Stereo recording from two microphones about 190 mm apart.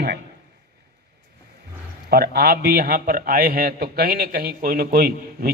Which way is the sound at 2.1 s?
55° right (ahead or behind).